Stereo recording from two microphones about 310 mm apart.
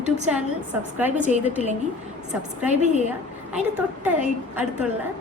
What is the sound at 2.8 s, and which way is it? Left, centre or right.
Speech, right.